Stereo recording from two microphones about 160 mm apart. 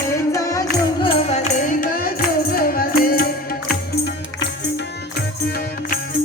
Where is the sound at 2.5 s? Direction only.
70° left (ahead or behind).